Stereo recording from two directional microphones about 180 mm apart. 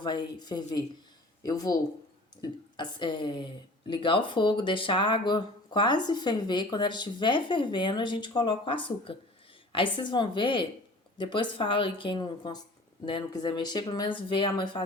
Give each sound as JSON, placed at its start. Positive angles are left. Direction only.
{"t": 0.0, "sound": "a woman's voice", "side_deg": 25}